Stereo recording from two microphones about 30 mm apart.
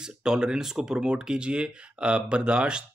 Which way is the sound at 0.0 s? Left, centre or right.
Right.